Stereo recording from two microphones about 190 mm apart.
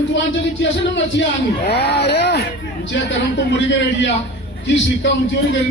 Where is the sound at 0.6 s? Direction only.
70° left (ahead or behind).